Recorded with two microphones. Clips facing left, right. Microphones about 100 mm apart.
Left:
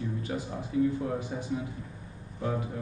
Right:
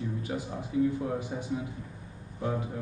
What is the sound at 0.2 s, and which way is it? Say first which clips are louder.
Speech: even; 15° right (ahead or behind).